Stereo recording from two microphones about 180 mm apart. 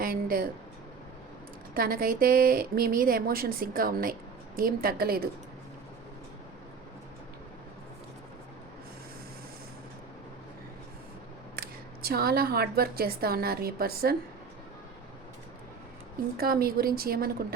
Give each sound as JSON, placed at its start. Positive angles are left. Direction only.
{"t": 0.0, "sound": "a sound", "side_deg": -55}
{"t": 1.7, "sound": "a woman's voice", "side_deg": -55}
{"t": 11.5, "sound": "a woman's voice", "side_deg": -60}
{"t": 16.4, "sound": "a woman's voice", "side_deg": -55}